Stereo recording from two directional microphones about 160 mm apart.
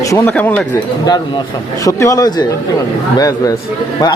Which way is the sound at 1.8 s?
20° left (ahead or behind).